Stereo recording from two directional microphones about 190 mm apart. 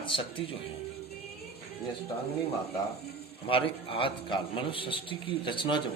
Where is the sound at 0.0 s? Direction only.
25° left (ahead or behind).